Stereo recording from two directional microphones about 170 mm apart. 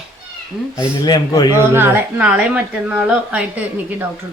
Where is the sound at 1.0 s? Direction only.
25° left (ahead or behind).